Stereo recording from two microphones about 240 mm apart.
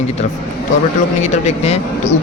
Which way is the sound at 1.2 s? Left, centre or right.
Left.